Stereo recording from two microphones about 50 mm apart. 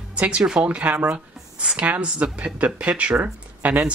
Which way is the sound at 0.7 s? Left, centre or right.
Right.